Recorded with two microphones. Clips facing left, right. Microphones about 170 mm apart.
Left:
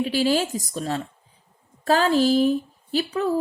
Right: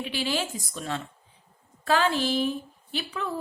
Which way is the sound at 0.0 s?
40° left (ahead or behind).